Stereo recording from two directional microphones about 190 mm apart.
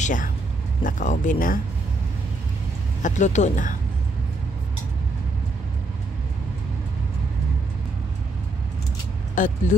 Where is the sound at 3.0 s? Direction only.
40° left (ahead or behind).